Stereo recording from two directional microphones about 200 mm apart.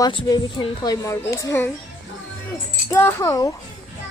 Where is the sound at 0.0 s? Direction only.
20° left (ahead or behind).